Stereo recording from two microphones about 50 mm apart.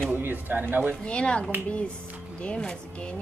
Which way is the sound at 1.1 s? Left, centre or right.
Left.